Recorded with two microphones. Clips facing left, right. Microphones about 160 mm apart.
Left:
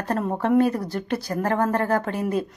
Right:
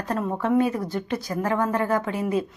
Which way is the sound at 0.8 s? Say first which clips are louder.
Left 1 dB; 65° left (ahead or behind).